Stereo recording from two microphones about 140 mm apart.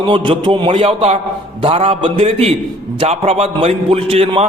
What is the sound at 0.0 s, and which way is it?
A man's voice, 35° right (ahead or behind).